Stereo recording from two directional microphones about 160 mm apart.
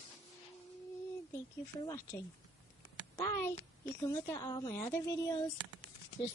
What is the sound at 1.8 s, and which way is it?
A woman's voice, 15° left (ahead or behind).